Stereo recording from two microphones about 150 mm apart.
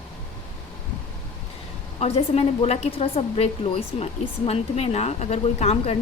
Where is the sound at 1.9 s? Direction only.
45° left (ahead or behind).